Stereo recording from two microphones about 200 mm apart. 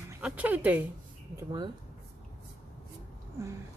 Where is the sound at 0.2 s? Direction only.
5° right (ahead or behind).